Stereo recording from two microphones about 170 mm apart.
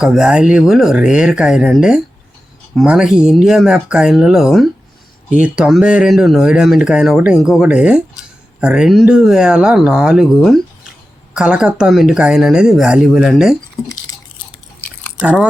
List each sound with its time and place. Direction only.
0.0 s speech: 5° right (ahead or behind)
15.2 s speech: 10° right (ahead or behind)